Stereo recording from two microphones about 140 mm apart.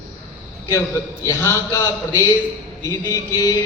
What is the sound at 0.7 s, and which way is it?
A man's voice, 20° left (ahead or behind).